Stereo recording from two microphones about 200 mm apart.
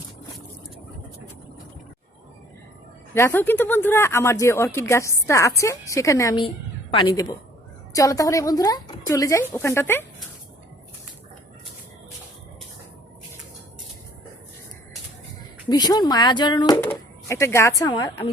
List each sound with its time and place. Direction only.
3.2 s a woman's voice: 10° left (ahead or behind)
15.7 s a woman's voice: 20° left (ahead or behind)